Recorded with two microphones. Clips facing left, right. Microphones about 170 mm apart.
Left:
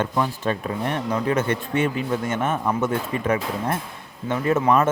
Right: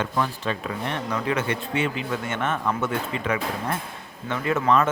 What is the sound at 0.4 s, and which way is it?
Speech, 45° left (ahead or behind).